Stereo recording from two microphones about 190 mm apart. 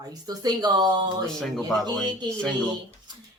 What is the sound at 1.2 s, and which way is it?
Speech, centre (ahead or behind).